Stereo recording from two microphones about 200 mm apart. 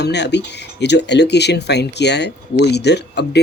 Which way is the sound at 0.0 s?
60° left (ahead or behind).